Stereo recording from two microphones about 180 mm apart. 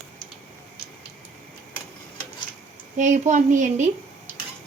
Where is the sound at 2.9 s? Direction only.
45° right (ahead or behind).